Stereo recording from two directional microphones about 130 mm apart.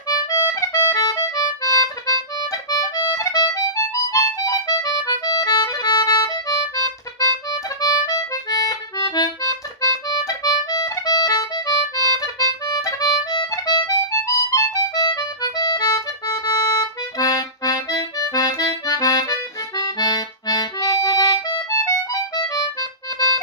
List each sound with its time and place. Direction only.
0.1 s accordion: 25° left (ahead or behind)
2.5 s music: 25° left (ahead or behind)
17.2 s accordion: 25° left (ahead or behind)